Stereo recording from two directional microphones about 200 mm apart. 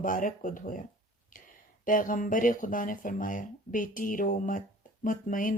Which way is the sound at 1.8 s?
40° left (ahead or behind).